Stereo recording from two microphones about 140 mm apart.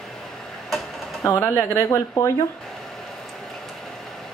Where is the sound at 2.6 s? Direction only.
Centre (ahead or behind).